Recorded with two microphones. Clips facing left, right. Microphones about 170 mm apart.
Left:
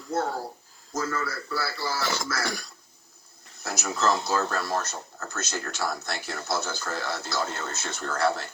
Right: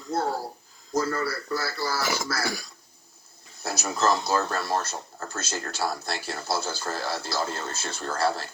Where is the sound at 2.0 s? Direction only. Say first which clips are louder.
Right 1 dB; 10° right (ahead or behind).